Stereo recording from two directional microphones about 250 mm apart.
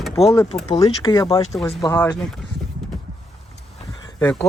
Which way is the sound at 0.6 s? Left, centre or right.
Centre.